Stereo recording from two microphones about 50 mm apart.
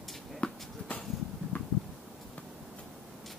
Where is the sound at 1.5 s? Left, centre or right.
Left.